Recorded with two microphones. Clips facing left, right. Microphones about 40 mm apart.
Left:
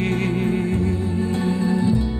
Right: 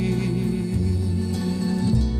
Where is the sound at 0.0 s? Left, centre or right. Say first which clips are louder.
Left 3 dB; left.